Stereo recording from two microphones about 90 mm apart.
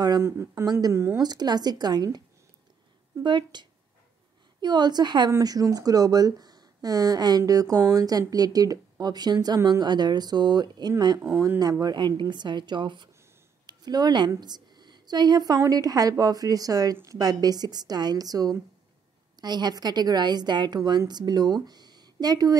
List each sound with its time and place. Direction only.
0.2 s speech: 30° right (ahead or behind)
0.7 s a woman's voice: 45° right (ahead or behind)
3.3 s speech: 60° right (ahead or behind)
5.4 s a woman's voice: 45° right (ahead or behind)
11.4 s speech: 35° right (ahead or behind)
11.8 s a woman's voice: 55° right (ahead or behind)